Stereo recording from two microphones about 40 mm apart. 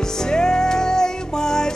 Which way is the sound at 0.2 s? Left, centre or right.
Centre.